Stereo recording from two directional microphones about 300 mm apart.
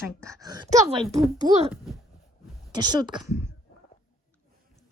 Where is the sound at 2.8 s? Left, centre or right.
Centre.